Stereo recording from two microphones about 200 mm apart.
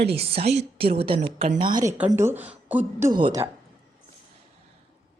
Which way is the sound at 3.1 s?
20° right (ahead or behind).